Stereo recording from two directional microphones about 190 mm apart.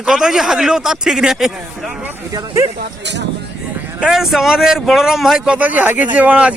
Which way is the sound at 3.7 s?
10° right (ahead or behind).